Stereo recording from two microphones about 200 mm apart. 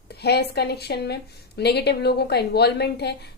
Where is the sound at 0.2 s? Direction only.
55° left (ahead or behind).